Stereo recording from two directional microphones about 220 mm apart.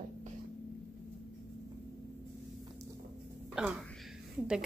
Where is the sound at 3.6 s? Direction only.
Centre (ahead or behind).